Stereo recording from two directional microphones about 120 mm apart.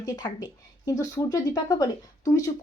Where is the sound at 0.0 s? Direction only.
30° left (ahead or behind).